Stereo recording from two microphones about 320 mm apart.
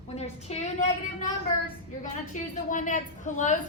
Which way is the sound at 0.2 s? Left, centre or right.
Centre.